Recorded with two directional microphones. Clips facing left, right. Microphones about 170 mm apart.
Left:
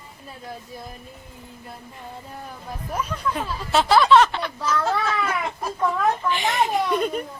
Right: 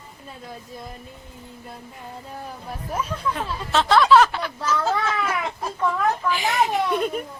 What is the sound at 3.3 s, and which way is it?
A child's voice, 5° left (ahead or behind).